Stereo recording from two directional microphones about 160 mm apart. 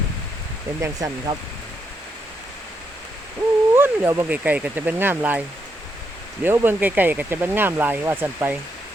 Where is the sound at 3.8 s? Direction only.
15° right (ahead or behind).